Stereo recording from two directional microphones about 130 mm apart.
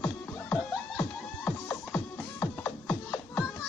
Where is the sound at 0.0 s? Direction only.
15° left (ahead or behind).